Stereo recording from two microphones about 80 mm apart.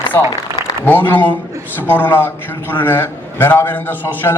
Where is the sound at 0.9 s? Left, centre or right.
Left.